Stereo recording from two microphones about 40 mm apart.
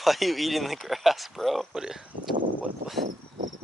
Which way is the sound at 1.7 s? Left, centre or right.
Centre.